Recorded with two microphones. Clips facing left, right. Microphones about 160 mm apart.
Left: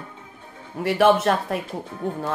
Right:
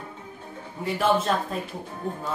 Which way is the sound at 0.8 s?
70° left (ahead or behind).